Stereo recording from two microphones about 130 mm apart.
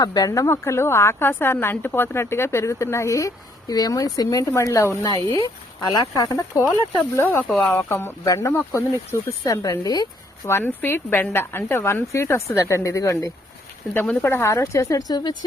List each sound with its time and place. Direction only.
0.0 s speech: 30° left (ahead or behind)
9.4 s speech: 30° left (ahead or behind)